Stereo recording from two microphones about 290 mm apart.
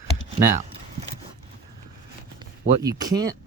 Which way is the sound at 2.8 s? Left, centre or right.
Centre.